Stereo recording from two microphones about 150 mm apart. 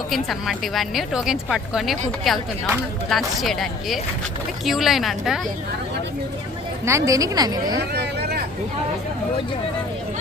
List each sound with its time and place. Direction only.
0.1 s speech: centre (ahead or behind)
6.8 s a woman's voice: 20° right (ahead or behind)
7.9 s vehicle: 90° right